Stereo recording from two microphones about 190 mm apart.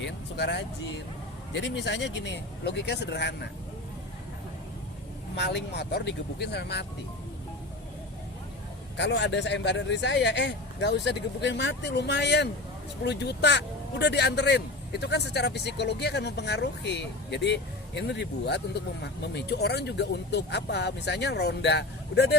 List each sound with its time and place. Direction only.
0.0 s speech: 65° left (ahead or behind)
5.4 s speech: 65° left (ahead or behind)
9.0 s speech: 65° left (ahead or behind)